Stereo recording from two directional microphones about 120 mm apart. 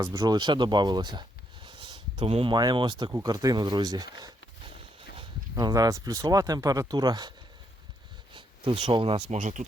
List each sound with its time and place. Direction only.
0.2 s speech: 40° right (ahead or behind)
1.6 s a sound: 40° right (ahead or behind)
2.2 s speech: 55° right (ahead or behind)
2.5 s speech: 35° right (ahead or behind)
5.5 s speech: 35° right (ahead or behind)
9.3 s speech: 90° right